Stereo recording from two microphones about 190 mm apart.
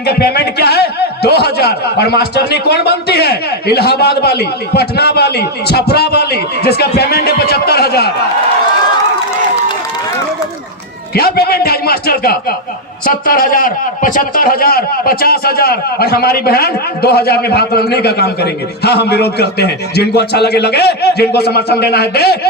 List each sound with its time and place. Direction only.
0.0 s a man's voice: 55° left (ahead or behind)
11.1 s a man's voice: 55° left (ahead or behind)